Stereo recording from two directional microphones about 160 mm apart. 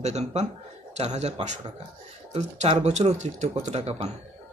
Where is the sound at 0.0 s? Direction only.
45° right (ahead or behind).